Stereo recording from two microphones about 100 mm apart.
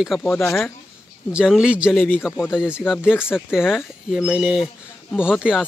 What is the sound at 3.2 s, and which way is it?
Speech, 20° left (ahead or behind).